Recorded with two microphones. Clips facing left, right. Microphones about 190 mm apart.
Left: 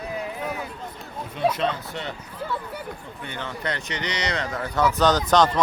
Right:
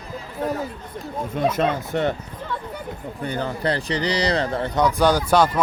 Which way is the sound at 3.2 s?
40° right (ahead or behind).